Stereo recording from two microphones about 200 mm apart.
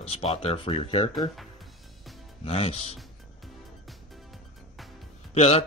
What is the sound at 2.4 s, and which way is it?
Chopping, 30° left (ahead or behind).